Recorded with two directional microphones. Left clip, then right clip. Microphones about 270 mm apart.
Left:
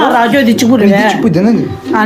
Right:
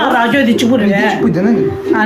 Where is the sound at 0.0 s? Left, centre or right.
Centre.